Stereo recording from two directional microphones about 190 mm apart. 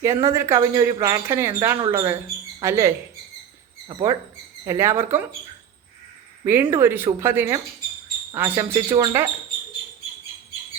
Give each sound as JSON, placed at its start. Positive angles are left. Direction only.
{"t": 0.0, "sound": "speech", "side_deg": -15}
{"t": 6.4, "sound": "speech", "side_deg": -10}